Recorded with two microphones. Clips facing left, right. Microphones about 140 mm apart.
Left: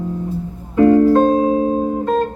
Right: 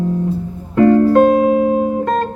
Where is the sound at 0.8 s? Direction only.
70° right (ahead or behind).